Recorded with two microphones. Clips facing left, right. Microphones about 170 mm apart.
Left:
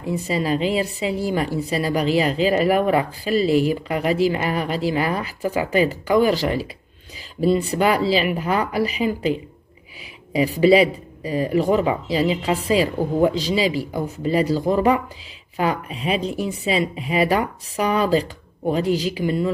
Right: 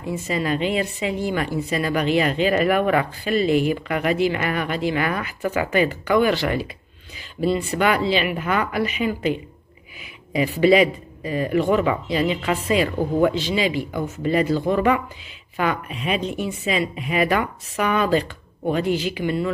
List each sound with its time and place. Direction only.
0.1 s a woman's voice: 35° left (ahead or behind)